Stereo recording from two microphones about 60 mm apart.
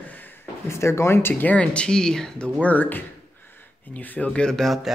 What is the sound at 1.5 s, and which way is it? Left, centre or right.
Speech, centre.